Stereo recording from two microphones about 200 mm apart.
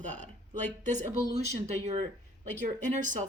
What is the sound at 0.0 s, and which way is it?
Speech, 35° right (ahead or behind).